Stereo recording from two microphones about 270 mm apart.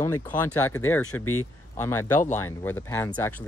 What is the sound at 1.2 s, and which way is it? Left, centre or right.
Speech, left.